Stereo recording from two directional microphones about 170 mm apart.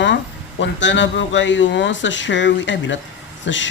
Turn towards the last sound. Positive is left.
turn(degrees=90)